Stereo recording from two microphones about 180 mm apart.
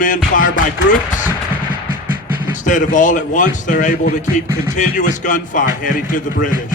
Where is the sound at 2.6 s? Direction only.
45° left (ahead or behind).